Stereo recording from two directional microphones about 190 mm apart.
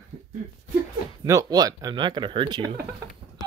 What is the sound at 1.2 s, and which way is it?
Speech, 20° right (ahead or behind).